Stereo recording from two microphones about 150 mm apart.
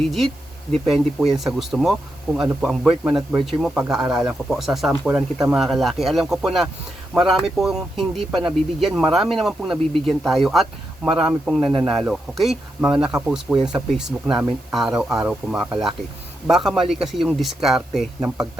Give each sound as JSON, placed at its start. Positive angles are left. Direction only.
{"t": 0.0, "sound": "speech", "side_deg": 0}